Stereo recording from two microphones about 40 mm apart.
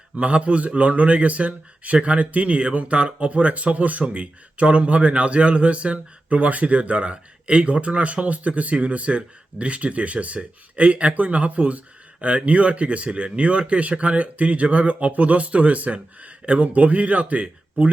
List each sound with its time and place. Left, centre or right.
0.2 s a man's voice: right